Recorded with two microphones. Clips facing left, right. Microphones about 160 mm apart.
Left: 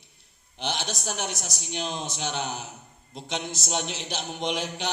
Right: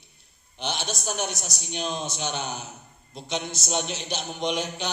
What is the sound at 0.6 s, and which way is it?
A man's voice, 90° left.